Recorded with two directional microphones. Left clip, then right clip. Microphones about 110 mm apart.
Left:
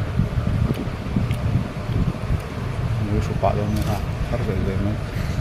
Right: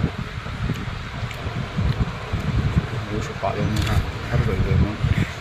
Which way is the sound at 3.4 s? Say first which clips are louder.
Left 4 dB; 20° left (ahead or behind).